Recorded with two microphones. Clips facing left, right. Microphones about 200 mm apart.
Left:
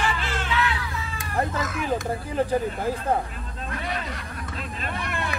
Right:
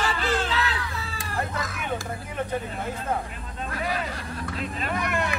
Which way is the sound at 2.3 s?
35° left (ahead or behind).